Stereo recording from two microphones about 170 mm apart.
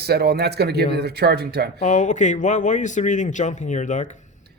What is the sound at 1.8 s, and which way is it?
Speech, 45° left (ahead or behind).